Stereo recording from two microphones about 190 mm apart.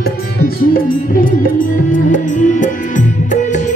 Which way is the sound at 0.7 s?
50° left (ahead or behind).